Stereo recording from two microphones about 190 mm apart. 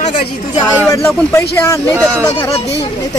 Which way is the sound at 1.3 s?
15° left (ahead or behind).